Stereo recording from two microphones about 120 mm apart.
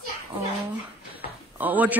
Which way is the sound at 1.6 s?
15° right (ahead or behind).